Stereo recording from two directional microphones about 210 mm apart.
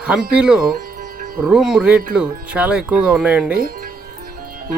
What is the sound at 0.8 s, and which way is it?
Music, 45° right (ahead or behind).